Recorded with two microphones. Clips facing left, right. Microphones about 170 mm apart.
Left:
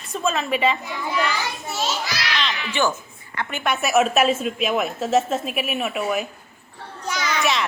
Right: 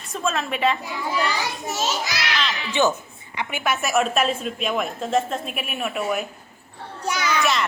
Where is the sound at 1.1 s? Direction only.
35° right (ahead or behind).